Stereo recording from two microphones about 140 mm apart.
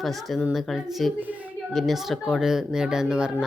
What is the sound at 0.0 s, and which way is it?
Speech, centre (ahead or behind).